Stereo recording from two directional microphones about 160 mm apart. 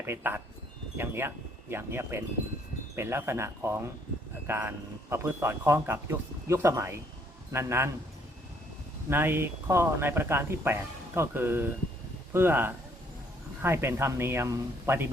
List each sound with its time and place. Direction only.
0.0 s speech: 15° right (ahead or behind)
9.0 s speech: 15° right (ahead or behind)